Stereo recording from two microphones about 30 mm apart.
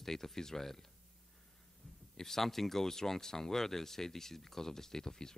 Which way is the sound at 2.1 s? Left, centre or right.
Centre.